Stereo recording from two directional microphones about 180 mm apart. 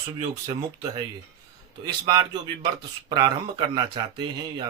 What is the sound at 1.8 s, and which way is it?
Speech, 25° right (ahead or behind).